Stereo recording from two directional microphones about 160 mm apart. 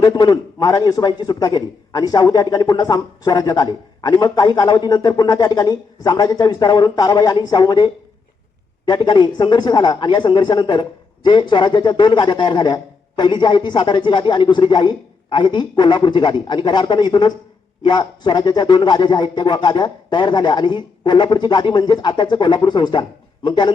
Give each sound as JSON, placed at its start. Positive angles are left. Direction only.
{"t": 0.0, "sound": "a man's voice", "side_deg": 25}
{"t": 8.9, "sound": "a man's voice", "side_deg": 30}